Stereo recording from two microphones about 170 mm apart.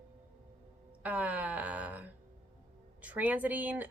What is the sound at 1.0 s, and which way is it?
Speech, 10° right (ahead or behind).